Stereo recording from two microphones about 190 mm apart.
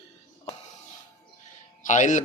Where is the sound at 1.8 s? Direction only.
40° left (ahead or behind).